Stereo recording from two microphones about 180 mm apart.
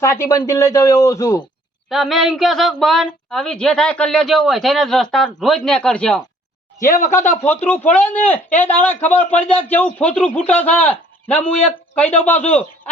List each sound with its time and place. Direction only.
0.0 s speech: 15° left (ahead or behind)
1.9 s speech: centre (ahead or behind)
6.7 s speech: 15° left (ahead or behind)
11.9 s speech: 10° left (ahead or behind)